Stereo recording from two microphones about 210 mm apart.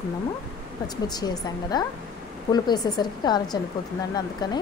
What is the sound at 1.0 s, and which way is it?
Speech, 20° left (ahead or behind).